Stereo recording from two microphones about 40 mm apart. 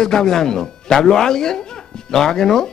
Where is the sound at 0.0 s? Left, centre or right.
Centre.